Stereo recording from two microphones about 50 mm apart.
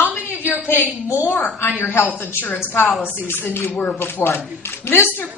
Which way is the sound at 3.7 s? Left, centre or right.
Centre.